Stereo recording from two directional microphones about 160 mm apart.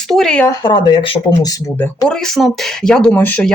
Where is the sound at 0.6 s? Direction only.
25° left (ahead or behind).